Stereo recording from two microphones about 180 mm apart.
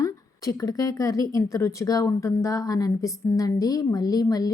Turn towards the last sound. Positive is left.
turn(degrees=20)  # may be behind; listen again after turning